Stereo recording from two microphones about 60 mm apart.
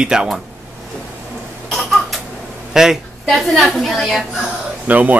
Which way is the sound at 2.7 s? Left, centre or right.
Centre.